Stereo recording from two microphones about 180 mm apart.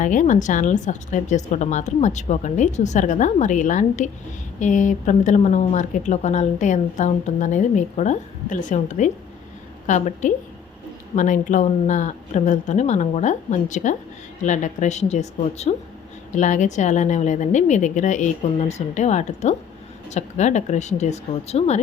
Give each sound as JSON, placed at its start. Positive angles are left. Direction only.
{"t": 0.0, "sound": "a woman's voice", "side_deg": 45}